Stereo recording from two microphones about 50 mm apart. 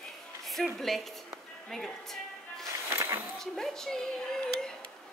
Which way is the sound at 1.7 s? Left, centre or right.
Centre.